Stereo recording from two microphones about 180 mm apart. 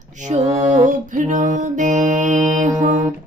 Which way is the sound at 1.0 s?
45° right (ahead or behind).